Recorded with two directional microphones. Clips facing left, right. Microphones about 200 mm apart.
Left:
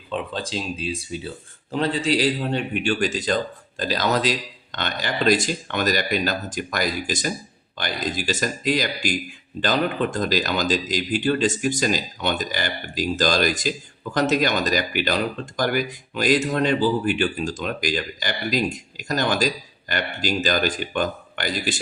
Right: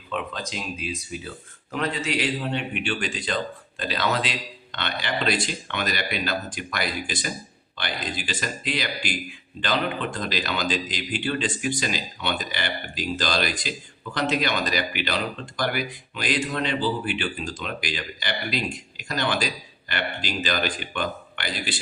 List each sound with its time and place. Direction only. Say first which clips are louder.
0.1 s speech: left 3 dB; 30° left (ahead or behind)